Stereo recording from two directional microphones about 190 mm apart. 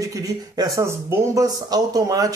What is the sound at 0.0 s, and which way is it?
Speech, 15° right (ahead or behind).